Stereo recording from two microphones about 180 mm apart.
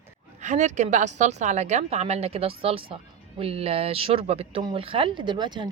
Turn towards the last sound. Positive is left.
turn(degrees=-25)  # may be behind; listen again after turning